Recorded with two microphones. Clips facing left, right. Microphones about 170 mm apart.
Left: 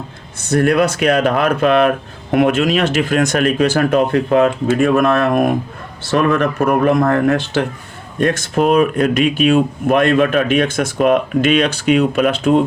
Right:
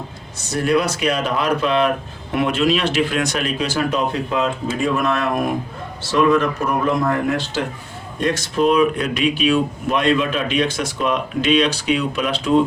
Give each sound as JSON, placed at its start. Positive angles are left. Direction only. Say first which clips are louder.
{"t": 0.5, "sound": "speech", "louder": "left 5 dB", "side_deg": 55}